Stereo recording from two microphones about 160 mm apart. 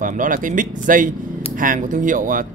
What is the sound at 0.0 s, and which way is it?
Speech, 55° right (ahead or behind).